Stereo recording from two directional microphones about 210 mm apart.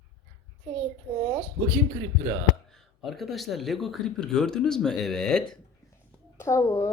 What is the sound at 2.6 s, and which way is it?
Speech, centre (ahead or behind).